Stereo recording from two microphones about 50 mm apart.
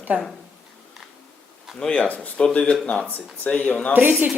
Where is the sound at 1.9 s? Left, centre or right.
Left.